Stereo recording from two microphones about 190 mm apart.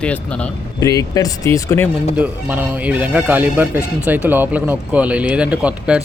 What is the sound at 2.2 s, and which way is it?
Speech, 10° right (ahead or behind).